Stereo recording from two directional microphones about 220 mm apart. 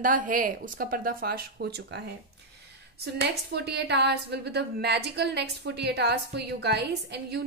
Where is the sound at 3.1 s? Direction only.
50° right (ahead or behind).